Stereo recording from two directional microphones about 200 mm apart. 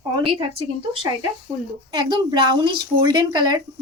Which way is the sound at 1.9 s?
20° right (ahead or behind).